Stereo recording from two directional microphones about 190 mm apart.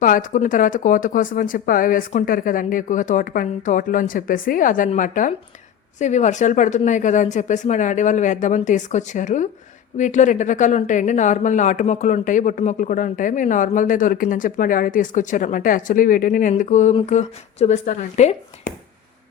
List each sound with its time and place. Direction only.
0.0 s speech: 45° left (ahead or behind)